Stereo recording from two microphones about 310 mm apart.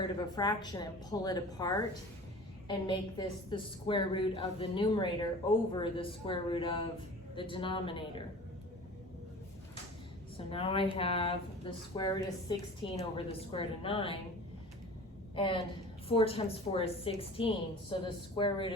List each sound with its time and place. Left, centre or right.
0.0 s a woman's voice: centre
10.3 s a woman's voice: centre
15.4 s a woman's voice: centre